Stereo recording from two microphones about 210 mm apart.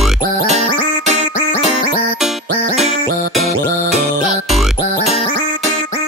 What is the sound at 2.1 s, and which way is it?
Music, centre (ahead or behind).